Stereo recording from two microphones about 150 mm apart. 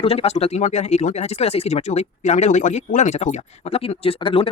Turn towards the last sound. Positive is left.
turn(degrees=35)  # may be behind; listen again after turning